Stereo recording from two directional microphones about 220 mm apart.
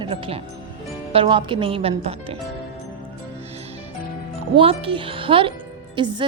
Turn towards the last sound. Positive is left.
turn(degrees=-20)  # may be behind; listen again after turning